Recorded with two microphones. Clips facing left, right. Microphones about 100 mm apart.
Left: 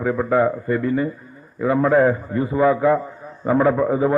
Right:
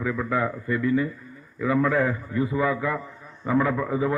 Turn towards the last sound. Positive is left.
turn(degrees=35)  # may be behind; listen again after turning